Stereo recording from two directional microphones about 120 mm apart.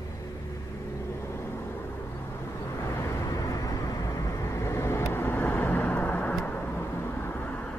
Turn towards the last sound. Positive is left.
turn(degrees=10)  # may be behind; listen again after turning